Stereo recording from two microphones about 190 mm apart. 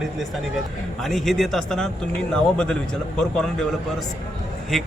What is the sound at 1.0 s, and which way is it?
A man's voice, centre (ahead or behind).